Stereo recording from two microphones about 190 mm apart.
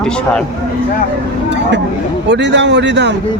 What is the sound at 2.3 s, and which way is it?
Speech, 70° right (ahead or behind).